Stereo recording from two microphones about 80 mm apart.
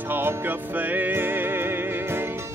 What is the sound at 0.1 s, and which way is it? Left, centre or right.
Music, right.